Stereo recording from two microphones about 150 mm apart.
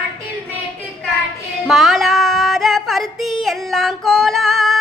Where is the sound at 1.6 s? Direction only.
Centre (ahead or behind).